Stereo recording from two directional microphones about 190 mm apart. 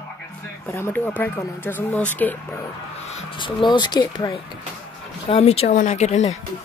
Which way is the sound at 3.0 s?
35° left (ahead or behind).